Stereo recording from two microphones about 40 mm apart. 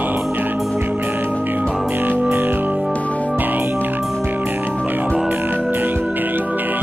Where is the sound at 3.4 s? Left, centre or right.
Right.